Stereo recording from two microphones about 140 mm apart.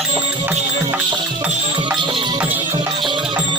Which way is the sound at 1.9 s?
35° right (ahead or behind).